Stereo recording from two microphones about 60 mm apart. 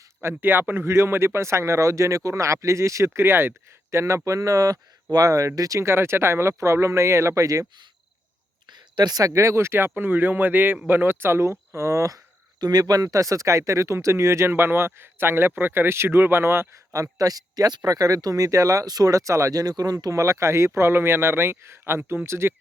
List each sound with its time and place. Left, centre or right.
0.2 s speech: right
4.3 s speech: right
5.1 s speech: right
5.5 s speech: right
5.9 s speech: right
9.1 s speech: right
12.6 s speech: right
14.5 s speech: right
16.9 s speech: right